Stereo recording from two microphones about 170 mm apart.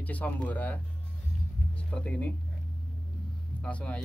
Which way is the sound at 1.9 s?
10° left (ahead or behind).